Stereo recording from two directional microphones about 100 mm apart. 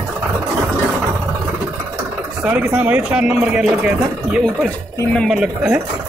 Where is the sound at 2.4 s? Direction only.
15° right (ahead or behind).